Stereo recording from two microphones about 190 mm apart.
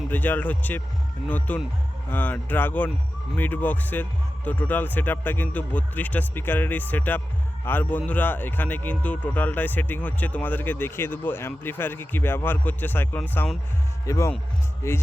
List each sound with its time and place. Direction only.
0.1 s a man's voice: 10° left (ahead or behind)